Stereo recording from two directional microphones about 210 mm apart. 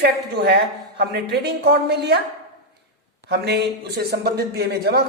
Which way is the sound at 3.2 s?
50° right (ahead or behind).